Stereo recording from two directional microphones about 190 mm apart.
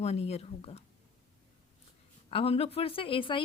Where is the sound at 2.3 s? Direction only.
30° left (ahead or behind).